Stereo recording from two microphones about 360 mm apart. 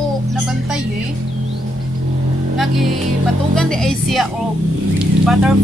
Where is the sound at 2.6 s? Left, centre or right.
Centre.